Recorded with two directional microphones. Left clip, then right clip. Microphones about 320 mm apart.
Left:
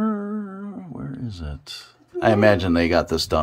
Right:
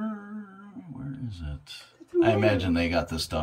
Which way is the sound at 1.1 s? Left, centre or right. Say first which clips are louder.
Left 6 dB; centre.